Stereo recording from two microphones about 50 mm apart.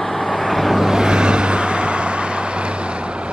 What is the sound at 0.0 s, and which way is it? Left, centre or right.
Vehicle, centre.